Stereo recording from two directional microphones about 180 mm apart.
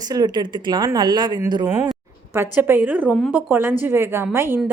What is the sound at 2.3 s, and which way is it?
Speech, 10° right (ahead or behind).